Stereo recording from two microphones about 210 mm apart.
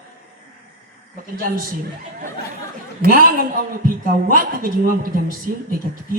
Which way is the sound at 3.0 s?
45° right (ahead or behind).